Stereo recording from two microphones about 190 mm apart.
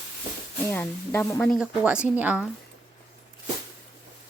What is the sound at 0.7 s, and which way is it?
Speech, 10° left (ahead or behind).